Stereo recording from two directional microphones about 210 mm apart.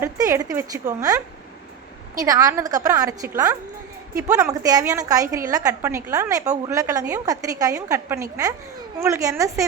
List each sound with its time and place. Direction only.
0.0 s a woman's voice: 15° right (ahead or behind)